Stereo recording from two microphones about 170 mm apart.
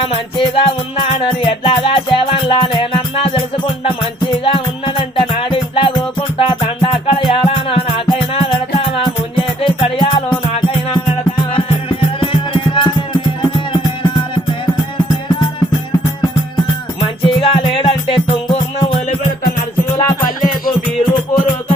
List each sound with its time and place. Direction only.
0.0 s music: 30° left (ahead or behind)
16.6 s music: 30° left (ahead or behind)
20.0 s music: 15° left (ahead or behind)